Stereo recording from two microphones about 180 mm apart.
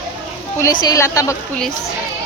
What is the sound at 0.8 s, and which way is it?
Speech, 20° left (ahead or behind).